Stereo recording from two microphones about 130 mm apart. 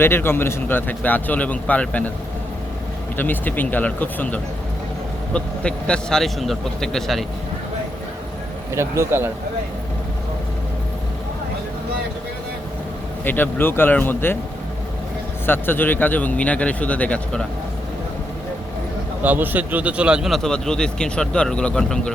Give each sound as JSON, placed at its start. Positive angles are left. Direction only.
{"t": 0.0, "sound": "a man's voice", "side_deg": 15}
{"t": 3.2, "sound": "a man's voice", "side_deg": 15}
{"t": 8.7, "sound": "speech", "side_deg": -20}
{"t": 13.2, "sound": "a man's voice", "side_deg": 15}
{"t": 15.4, "sound": "a man's voice", "side_deg": 15}
{"t": 19.2, "sound": "speech", "side_deg": -15}